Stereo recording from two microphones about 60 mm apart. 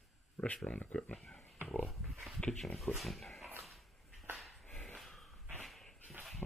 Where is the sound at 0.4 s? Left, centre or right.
Centre.